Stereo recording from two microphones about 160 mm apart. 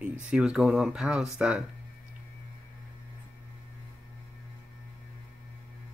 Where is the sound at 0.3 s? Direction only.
5° right (ahead or behind).